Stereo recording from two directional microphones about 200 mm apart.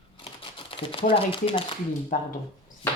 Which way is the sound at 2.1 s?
40° left (ahead or behind).